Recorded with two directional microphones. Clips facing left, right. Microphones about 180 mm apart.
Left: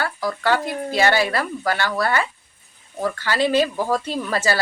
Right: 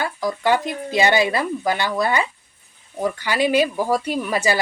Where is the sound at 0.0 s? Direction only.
15° right (ahead or behind).